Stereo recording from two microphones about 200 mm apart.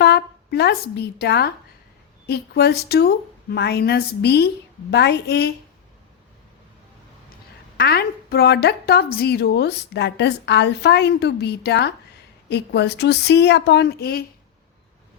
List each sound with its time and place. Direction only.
0.0 s a woman's voice: 55° left (ahead or behind)
7.8 s a woman's voice: 55° left (ahead or behind)